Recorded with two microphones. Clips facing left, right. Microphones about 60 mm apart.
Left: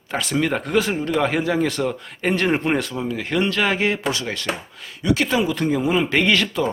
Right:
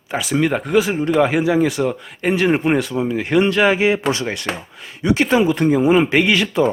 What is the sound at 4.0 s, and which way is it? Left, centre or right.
Speech, right.